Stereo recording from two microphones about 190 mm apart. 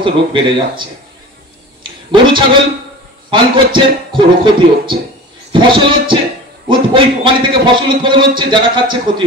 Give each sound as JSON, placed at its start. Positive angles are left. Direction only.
{"t": 0.0, "sound": "a man's voice", "side_deg": -25}
{"t": 1.8, "sound": "a sound", "side_deg": -25}
{"t": 3.3, "sound": "a man's voice", "side_deg": -25}